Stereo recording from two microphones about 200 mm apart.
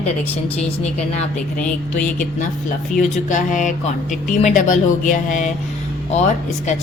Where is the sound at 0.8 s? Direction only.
30° left (ahead or behind).